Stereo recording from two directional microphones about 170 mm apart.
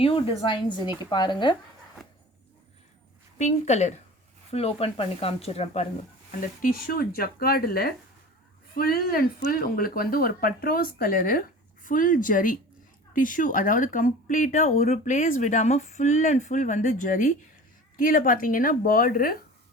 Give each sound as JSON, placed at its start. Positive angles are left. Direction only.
{"t": 0.0, "sound": "a woman's voice", "side_deg": 30}
{"t": 3.3, "sound": "speech", "side_deg": 45}
{"t": 6.6, "sound": "speech", "side_deg": 55}